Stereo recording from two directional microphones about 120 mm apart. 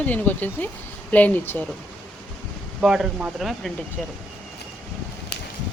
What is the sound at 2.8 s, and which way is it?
Speech, 5° right (ahead or behind).